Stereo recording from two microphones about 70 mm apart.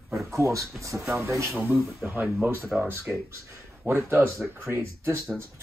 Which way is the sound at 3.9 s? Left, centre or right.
Right.